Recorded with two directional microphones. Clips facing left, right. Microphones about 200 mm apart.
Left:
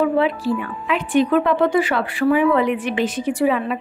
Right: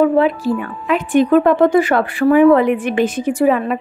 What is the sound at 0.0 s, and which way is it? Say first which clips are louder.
Speech: right 5 dB; 45° right (ahead or behind).